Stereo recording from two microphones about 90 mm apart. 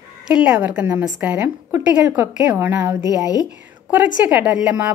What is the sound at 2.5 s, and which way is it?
Speech, 20° right (ahead or behind).